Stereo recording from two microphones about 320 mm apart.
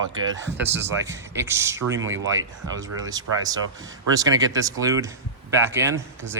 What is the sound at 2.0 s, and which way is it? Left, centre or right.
Speech, right.